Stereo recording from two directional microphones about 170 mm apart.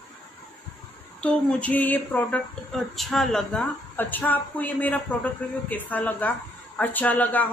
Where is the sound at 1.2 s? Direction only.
10° left (ahead or behind).